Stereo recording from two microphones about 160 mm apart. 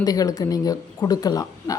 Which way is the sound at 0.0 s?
25° left (ahead or behind).